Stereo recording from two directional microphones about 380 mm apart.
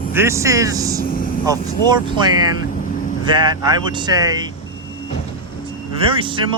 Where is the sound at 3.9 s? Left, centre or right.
Centre.